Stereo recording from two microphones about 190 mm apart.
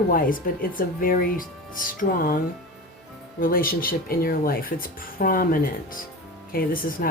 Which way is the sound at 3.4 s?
50° left (ahead or behind).